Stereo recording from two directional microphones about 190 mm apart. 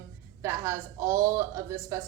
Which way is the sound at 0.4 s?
15° right (ahead or behind).